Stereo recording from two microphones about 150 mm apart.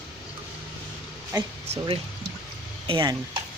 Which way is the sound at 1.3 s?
25° right (ahead or behind).